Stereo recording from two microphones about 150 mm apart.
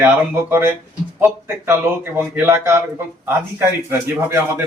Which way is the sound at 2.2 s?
15° right (ahead or behind).